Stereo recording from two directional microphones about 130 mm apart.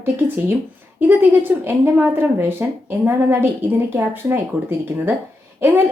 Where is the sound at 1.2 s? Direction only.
15° right (ahead or behind).